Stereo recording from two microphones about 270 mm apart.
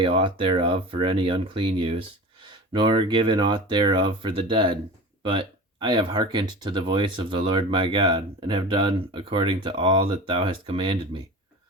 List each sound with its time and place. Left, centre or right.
0.0 s speech: centre